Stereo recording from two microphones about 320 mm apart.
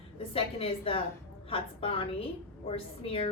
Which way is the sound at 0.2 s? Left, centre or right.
Centre.